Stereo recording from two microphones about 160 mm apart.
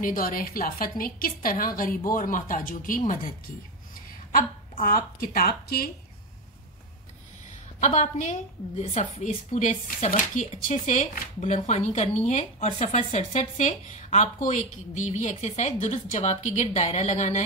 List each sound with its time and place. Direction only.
0.0 s a woman's voice: 60° left (ahead or behind)
4.8 s a woman's voice: 65° left (ahead or behind)
7.8 s speech: 45° left (ahead or behind)